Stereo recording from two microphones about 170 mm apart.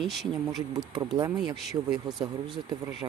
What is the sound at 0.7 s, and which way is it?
Speech, 25° right (ahead or behind).